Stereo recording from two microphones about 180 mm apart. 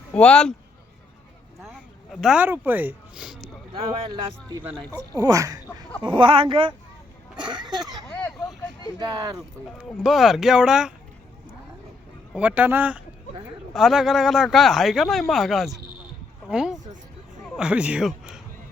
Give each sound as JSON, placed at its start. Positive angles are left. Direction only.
{"t": 0.1, "sound": "speech", "side_deg": 5}
{"t": 2.2, "sound": "speech", "side_deg": -5}
{"t": 5.1, "sound": "speech", "side_deg": -20}
{"t": 8.0, "sound": "vehicle", "side_deg": 5}
{"t": 9.0, "sound": "speech", "side_deg": -20}
{"t": 9.7, "sound": "speech", "side_deg": 0}
{"t": 12.3, "sound": "speech", "side_deg": -10}